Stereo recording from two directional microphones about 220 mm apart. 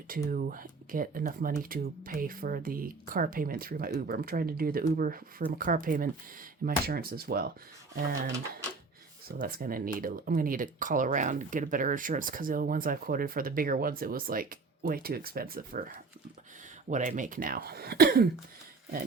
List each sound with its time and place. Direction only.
0.3 s speech: 40° right (ahead or behind)
9.4 s speech: 40° right (ahead or behind)